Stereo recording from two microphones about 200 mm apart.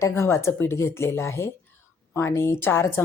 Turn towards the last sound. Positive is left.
turn(degrees=10)  # may be behind; listen again after turning